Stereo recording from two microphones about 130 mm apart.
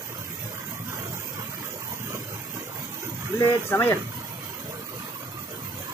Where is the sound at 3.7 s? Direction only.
15° left (ahead or behind).